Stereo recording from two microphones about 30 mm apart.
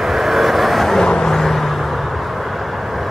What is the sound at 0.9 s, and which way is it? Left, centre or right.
Vehicle, left.